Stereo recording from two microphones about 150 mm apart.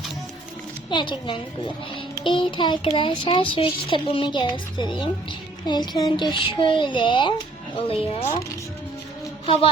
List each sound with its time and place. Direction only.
0.9 s a child's voice: 30° left (ahead or behind)